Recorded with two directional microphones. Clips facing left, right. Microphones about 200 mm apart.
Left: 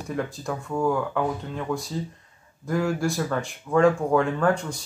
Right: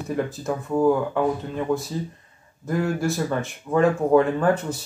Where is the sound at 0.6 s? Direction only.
15° right (ahead or behind).